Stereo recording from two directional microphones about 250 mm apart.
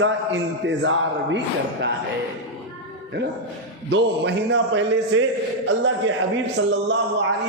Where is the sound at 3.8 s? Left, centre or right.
Right.